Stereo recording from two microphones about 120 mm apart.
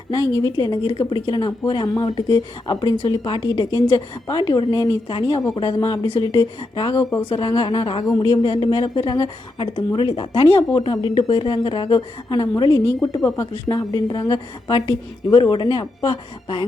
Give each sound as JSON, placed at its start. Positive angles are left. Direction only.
{"t": 0.1, "sound": "a woman's voice", "side_deg": 30}
{"t": 6.9, "sound": "speech", "side_deg": 25}
{"t": 7.3, "sound": "a woman's voice", "side_deg": 40}
{"t": 10.7, "sound": "a woman's voice", "side_deg": 35}